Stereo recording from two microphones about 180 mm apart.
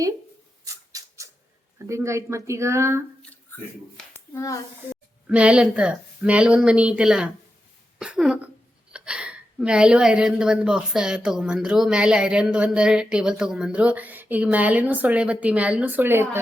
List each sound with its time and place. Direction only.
0.6 s a sound: 20° right (ahead or behind)
1.9 s speech: 15° right (ahead or behind)
3.9 s a child's voice: 15° left (ahead or behind)
5.3 s a woman's voice: 5° right (ahead or behind)
7.9 s cough: 5° right (ahead or behind)
8.9 s a woman's voice: 5° right (ahead or behind)